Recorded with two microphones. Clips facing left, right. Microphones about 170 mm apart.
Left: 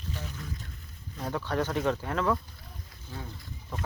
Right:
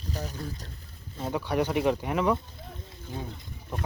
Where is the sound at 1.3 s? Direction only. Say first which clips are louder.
Right 3 dB; 15° right (ahead or behind).